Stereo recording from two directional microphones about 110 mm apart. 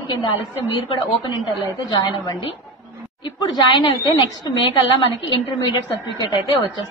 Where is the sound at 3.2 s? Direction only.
40° left (ahead or behind).